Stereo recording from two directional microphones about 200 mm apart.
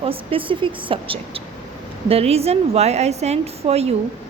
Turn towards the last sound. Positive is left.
turn(degrees=-30)  # may be behind; listen again after turning